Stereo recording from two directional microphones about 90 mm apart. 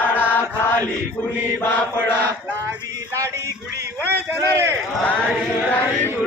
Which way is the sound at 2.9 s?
30° right (ahead or behind).